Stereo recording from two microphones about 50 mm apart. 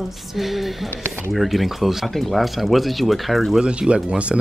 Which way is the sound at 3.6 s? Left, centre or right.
Right.